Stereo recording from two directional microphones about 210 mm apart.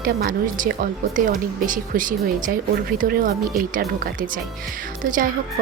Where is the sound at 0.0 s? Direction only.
40° right (ahead or behind).